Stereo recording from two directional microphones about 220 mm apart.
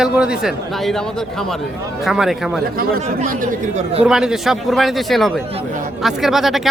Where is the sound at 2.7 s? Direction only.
40° right (ahead or behind).